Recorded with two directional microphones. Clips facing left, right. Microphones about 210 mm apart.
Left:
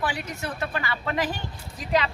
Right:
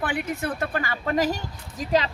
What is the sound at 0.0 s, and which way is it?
A woman's voice, 55° right (ahead or behind).